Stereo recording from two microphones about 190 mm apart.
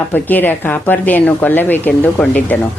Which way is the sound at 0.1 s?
10° left (ahead or behind).